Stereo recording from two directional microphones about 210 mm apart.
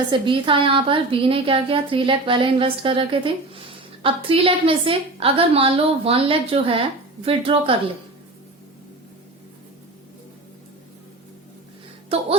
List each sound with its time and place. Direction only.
0.1 s a woman's voice: 25° right (ahead or behind)